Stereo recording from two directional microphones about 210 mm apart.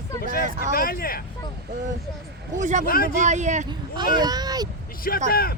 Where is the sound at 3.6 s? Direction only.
20° right (ahead or behind).